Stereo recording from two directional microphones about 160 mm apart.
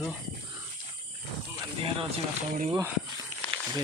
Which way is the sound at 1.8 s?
35° right (ahead or behind).